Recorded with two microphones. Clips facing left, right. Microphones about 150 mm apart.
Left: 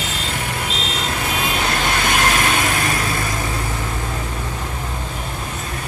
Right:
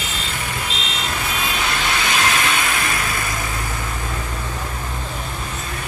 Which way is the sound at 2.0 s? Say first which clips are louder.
Left 2 dB; 50° left (ahead or behind).